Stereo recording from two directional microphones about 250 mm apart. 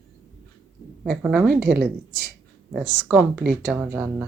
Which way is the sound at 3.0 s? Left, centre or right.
Centre.